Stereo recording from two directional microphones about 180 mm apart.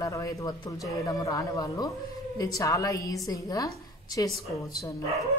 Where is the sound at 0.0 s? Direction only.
20° left (ahead or behind).